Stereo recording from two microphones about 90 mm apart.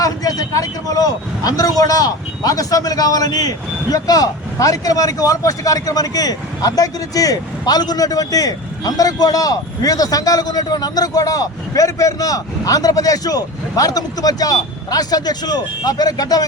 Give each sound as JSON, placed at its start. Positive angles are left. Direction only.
{"t": 0.0, "sound": "speech", "side_deg": 40}